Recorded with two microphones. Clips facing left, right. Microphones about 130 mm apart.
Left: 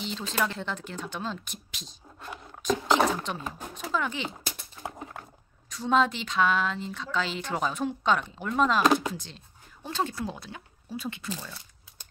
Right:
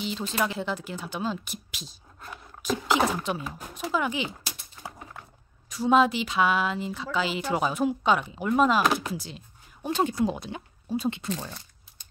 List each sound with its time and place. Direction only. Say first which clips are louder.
0.0 s speech: right 2 dB; 5° right (ahead or behind)
4.8 s a sound: left 3 dB; 30° left (ahead or behind)
5.7 s speech: right 3 dB; 10° right (ahead or behind)